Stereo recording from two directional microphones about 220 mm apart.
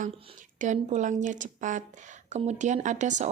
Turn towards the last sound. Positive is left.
turn(degrees=-35)  # may be behind; listen again after turning